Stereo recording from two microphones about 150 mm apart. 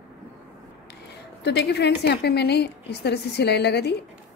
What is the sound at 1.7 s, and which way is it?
A woman's voice, 90° left.